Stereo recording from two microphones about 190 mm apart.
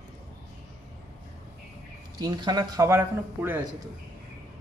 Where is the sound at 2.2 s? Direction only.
20° right (ahead or behind).